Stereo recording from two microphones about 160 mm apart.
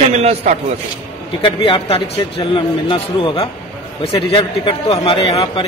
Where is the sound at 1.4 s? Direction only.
35° left (ahead or behind).